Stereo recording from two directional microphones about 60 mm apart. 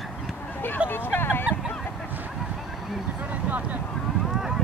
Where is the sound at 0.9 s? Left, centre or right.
Left.